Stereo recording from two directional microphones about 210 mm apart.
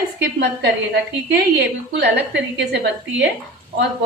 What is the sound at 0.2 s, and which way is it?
A woman's voice, 55° right (ahead or behind).